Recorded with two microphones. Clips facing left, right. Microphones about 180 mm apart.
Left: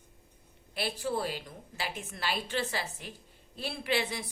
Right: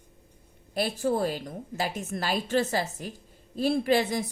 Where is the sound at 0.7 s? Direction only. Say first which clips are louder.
Right 7 dB; 45° right (ahead or behind).